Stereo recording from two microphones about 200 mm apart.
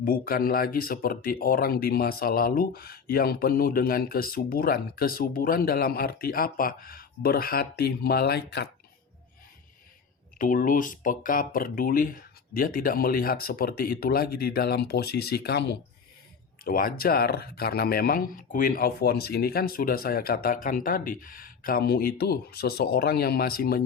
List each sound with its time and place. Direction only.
0.0 s speech: 45° left (ahead or behind)
10.3 s speech: 45° left (ahead or behind)
16.6 s speech: 45° left (ahead or behind)